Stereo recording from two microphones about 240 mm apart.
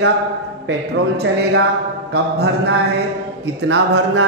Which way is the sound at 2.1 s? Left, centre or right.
Right.